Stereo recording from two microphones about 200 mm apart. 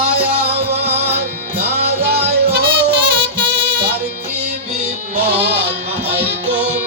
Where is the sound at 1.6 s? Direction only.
55° right (ahead or behind).